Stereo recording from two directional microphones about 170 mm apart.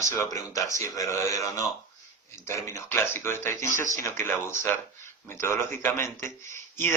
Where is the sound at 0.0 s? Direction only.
15° left (ahead or behind).